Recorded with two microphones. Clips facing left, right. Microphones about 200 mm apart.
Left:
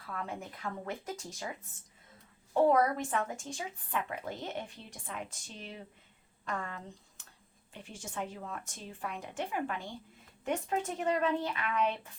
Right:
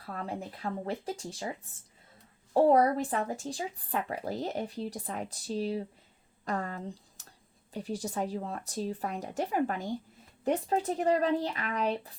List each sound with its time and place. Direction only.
0.0 s speech: 35° right (ahead or behind)